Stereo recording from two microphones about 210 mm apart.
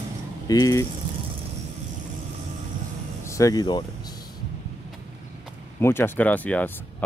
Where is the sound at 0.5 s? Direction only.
15° left (ahead or behind).